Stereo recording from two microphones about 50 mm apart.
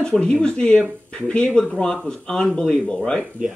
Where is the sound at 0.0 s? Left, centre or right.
Centre.